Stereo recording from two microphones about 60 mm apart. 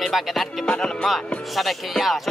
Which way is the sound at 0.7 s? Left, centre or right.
Centre.